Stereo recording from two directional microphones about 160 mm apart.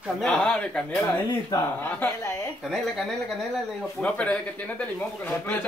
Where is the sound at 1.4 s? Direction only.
20° left (ahead or behind).